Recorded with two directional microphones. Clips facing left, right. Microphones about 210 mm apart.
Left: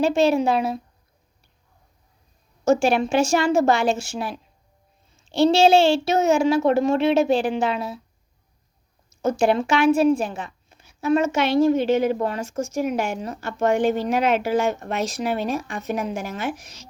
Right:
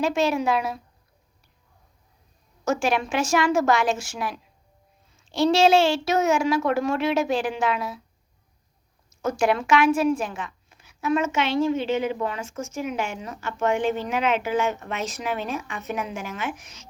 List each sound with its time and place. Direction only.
0.0 s a child's voice: 30° left (ahead or behind)
2.6 s a child's voice: 30° left (ahead or behind)
9.0 s speech: 30° left (ahead or behind)